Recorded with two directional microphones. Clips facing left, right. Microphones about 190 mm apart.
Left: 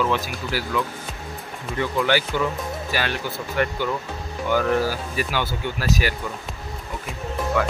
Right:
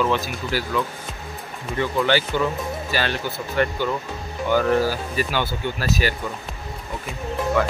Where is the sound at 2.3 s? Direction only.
15° right (ahead or behind).